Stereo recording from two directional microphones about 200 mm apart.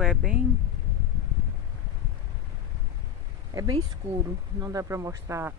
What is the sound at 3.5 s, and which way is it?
Speech, 20° right (ahead or behind).